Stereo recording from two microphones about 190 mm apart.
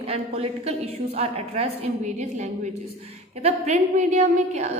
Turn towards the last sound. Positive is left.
turn(degrees=-35)  # may be behind; listen again after turning